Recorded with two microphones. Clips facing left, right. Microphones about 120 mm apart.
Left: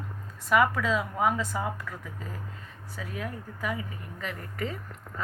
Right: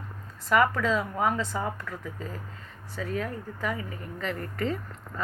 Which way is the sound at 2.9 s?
10° left (ahead or behind).